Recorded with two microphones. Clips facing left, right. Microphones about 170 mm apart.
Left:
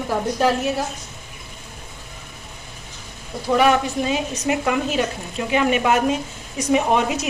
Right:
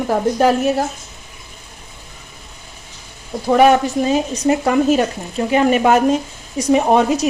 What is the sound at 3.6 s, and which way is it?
A woman's voice, 40° right (ahead or behind).